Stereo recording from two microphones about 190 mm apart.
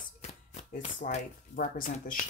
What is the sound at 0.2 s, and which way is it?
Speech, 40° left (ahead or behind).